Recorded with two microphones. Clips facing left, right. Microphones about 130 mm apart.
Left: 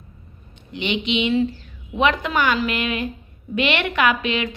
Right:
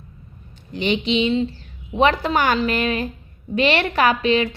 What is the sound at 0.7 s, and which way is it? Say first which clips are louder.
A woman's voice: right 3 dB; 35° right (ahead or behind).